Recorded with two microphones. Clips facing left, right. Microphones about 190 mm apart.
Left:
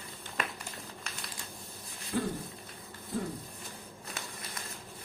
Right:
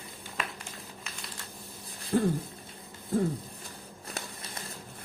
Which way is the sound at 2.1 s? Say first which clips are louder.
Right 6 dB; 45° right (ahead or behind).